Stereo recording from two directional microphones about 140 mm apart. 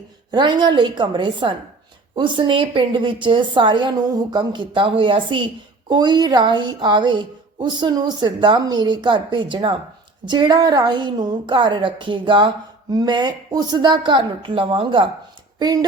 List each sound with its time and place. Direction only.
0.3 s a woman's voice: 35° right (ahead or behind)